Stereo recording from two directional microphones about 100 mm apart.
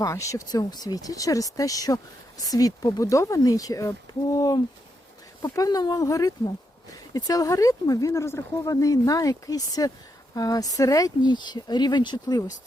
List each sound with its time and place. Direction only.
0.0 s speech: 30° left (ahead or behind)